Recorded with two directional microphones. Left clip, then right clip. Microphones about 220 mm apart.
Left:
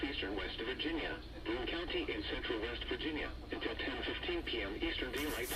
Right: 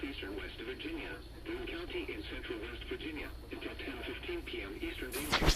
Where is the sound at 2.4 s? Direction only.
35° left (ahead or behind).